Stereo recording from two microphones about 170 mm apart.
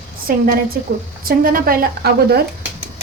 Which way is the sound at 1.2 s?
55° right (ahead or behind).